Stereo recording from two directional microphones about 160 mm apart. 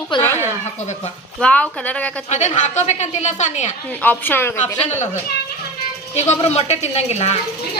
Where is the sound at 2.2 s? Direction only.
45° left (ahead or behind).